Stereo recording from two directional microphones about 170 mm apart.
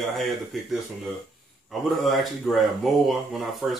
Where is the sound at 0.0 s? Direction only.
Centre (ahead or behind).